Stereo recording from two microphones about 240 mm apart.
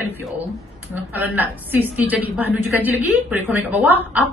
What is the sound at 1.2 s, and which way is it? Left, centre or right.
A man's voice, centre.